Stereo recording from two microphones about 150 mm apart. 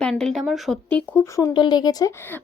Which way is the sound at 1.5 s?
30° left (ahead or behind).